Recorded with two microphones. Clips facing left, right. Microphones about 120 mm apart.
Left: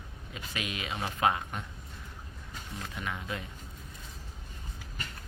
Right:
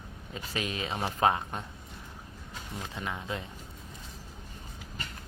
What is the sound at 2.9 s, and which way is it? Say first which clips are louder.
Speech: right 1 dB; 25° right (ahead or behind).